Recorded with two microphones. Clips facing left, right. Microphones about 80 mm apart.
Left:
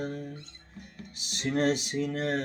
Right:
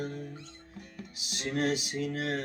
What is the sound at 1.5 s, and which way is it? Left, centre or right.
Music, left.